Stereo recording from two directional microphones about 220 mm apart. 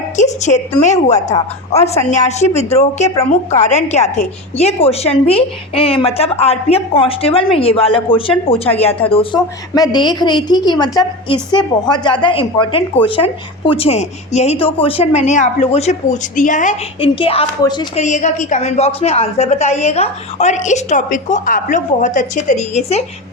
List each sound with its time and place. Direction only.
0.2 s a woman's voice: 30° left (ahead or behind)
18.0 s a woman's voice: 30° left (ahead or behind)